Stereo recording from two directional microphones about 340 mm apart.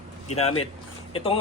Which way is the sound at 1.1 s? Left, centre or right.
Centre.